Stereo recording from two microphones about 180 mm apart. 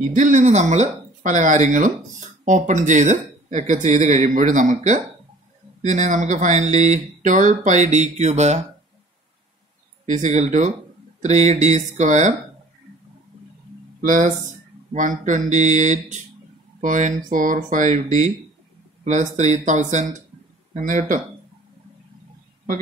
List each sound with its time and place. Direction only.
0.1 s speech: 45° right (ahead or behind)
10.0 s speech: 40° right (ahead or behind)
14.0 s speech: 45° right (ahead or behind)